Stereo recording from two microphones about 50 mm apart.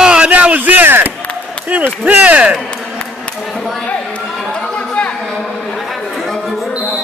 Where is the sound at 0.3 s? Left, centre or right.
Right.